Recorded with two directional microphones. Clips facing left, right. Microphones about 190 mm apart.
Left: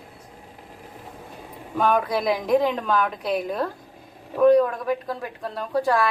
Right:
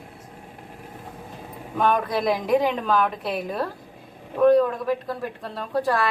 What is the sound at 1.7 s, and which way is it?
Speech, centre (ahead or behind).